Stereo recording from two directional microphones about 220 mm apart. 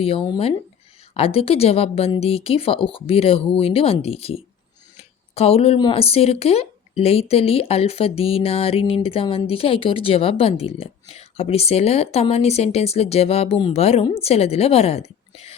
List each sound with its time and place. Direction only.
0.0 s speech: 25° left (ahead or behind)